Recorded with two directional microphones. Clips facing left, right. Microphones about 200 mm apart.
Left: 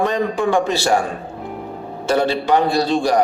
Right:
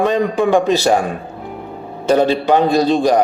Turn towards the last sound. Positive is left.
turn(degrees=-15)  # may be behind; listen again after turning